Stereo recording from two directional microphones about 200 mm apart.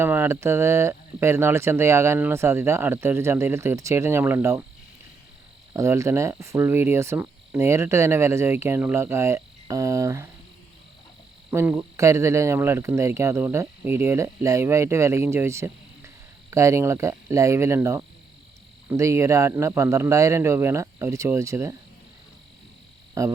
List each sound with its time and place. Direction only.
0.0 s speech: 10° right (ahead or behind)
5.7 s speech: 15° right (ahead or behind)
11.5 s speech: 10° right (ahead or behind)
23.2 s speech: 15° right (ahead or behind)